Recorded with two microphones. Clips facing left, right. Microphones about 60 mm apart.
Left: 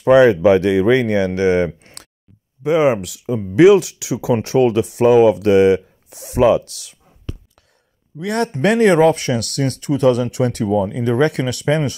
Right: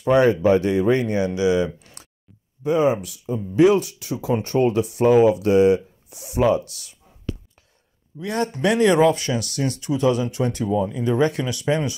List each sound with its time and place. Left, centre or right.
0.0 s speech: left
2.6 s speech: left
8.2 s speech: left
8.5 s speech: left